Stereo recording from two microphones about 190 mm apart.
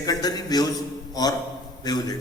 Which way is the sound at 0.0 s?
20° left (ahead or behind).